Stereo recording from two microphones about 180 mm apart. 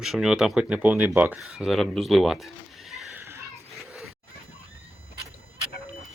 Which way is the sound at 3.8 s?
Centre (ahead or behind).